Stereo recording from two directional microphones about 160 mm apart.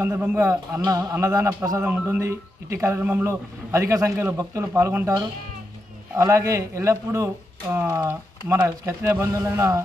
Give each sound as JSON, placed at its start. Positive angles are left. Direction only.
{"t": 0.0, "sound": "a man's voice", "side_deg": -10}